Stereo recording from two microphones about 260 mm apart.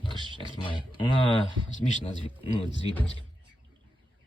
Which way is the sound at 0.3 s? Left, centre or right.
Centre.